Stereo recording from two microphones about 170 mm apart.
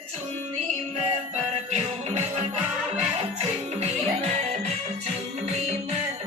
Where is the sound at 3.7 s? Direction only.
40° right (ahead or behind).